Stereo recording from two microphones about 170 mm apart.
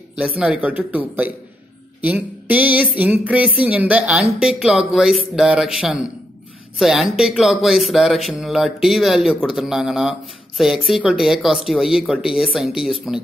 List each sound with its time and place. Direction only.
0.4 s speech: 10° right (ahead or behind)